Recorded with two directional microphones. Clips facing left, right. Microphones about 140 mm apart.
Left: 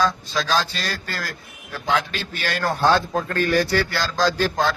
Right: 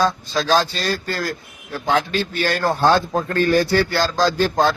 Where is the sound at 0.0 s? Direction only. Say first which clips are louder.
Right 2 dB; 30° right (ahead or behind).